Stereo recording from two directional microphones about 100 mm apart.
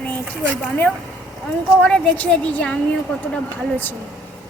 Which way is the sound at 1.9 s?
15° left (ahead or behind).